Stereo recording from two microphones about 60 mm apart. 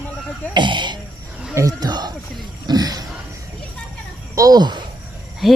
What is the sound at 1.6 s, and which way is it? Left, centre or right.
Speech, right.